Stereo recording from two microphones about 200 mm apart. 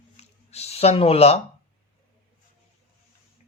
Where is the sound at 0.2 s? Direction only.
30° left (ahead or behind).